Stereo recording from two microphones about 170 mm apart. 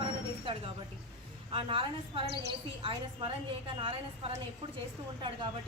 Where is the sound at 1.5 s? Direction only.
30° right (ahead or behind).